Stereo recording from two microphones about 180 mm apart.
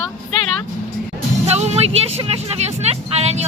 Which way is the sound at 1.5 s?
35° right (ahead or behind).